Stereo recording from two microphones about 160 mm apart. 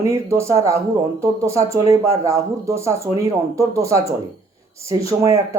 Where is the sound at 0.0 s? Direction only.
20° right (ahead or behind).